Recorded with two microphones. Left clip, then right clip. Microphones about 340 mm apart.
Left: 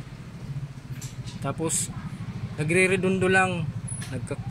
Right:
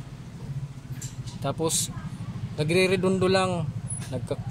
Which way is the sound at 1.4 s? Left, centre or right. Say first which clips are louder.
Right 2 dB; centre.